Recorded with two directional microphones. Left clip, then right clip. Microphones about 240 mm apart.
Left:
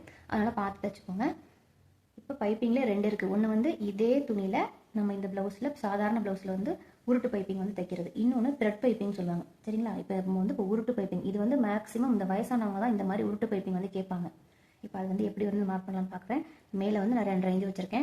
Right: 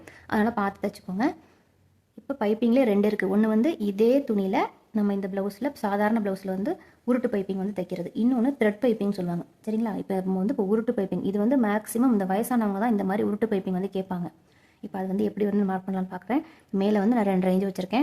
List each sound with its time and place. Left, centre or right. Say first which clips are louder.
0.0 s a woman's voice: right 6 dB; right